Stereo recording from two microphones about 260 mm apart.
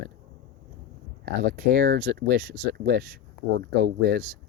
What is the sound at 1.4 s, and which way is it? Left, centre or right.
Speech, right.